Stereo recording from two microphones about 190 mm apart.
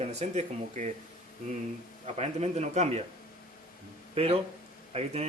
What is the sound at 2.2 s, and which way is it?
Speech, 35° right (ahead or behind).